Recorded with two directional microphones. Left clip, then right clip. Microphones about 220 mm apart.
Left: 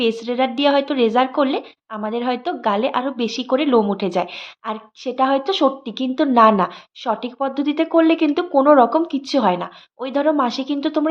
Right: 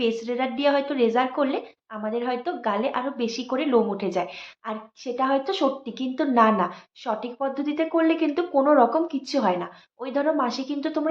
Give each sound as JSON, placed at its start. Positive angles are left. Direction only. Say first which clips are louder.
{"t": 0.0, "sound": "a woman's voice", "louder": "left 6 dB", "side_deg": 45}